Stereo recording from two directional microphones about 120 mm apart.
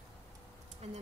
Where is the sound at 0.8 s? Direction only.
65° right (ahead or behind).